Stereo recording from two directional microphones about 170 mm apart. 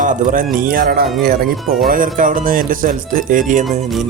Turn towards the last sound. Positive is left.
turn(degrees=-50)  # may be behind; listen again after turning